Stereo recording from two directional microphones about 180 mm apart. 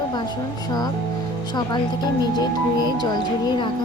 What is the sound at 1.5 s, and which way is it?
Speech, 25° left (ahead or behind).